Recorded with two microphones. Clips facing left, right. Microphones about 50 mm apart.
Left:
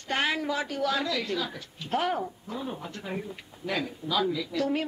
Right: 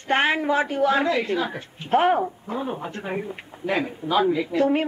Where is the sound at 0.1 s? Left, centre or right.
Right.